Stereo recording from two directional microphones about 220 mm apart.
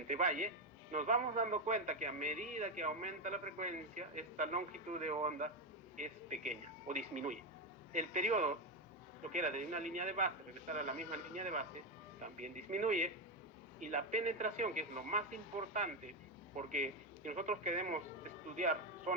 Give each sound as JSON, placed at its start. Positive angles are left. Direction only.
{"t": 0.1, "sound": "a man's voice", "side_deg": -35}